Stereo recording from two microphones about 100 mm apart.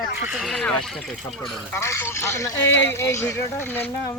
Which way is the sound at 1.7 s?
25° left (ahead or behind).